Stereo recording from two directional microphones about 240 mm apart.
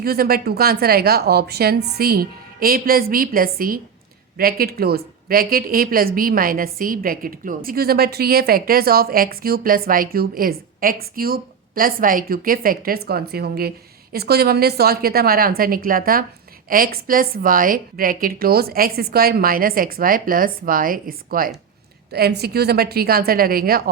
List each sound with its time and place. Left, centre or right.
0.0 s speech: right